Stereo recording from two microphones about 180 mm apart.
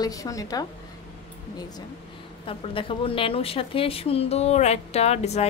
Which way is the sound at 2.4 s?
30° left (ahead or behind).